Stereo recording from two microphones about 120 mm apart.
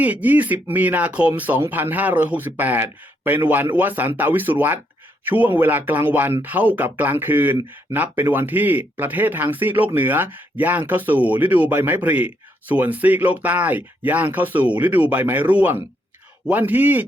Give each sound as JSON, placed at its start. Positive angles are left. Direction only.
{"t": 0.0, "sound": "speech", "side_deg": -15}